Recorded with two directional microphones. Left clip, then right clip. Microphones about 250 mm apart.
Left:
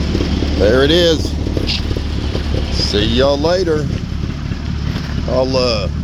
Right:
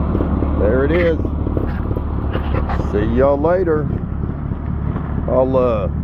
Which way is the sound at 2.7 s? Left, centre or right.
Left.